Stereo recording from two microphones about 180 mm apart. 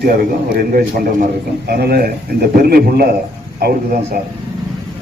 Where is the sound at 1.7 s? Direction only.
60° right (ahead or behind).